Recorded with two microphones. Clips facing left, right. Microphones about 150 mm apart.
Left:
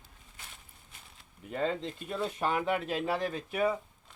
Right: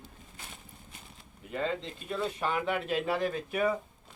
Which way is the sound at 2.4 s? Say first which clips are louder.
Left 3 dB; 40° left (ahead or behind).